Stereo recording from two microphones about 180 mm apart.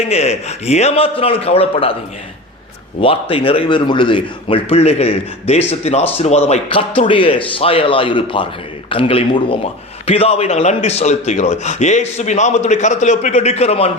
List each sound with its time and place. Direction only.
0.0 s a man's voice: 35° left (ahead or behind)
3.0 s a man's voice: 30° left (ahead or behind)